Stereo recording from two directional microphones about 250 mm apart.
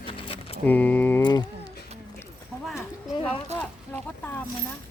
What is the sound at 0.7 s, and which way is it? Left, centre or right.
Speech, centre.